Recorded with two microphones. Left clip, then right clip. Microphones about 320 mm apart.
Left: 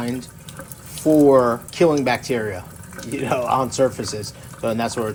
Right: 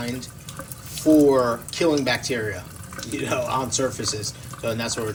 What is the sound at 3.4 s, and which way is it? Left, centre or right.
Speech, centre.